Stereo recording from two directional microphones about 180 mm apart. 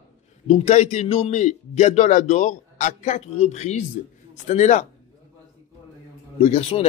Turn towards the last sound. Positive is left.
turn(degrees=35)  # may be behind; listen again after turning